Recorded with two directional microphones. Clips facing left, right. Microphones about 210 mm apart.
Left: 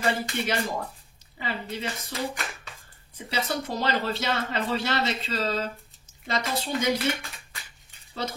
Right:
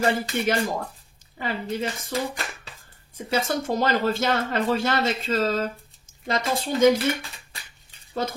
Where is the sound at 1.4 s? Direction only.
50° right (ahead or behind).